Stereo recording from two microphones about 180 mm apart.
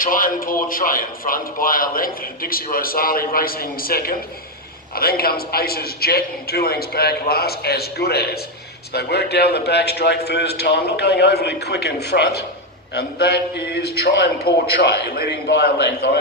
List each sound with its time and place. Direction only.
0.0 s a man's voice: 50° left (ahead or behind)